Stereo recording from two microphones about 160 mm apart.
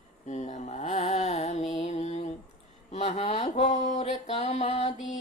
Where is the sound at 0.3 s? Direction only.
45° left (ahead or behind).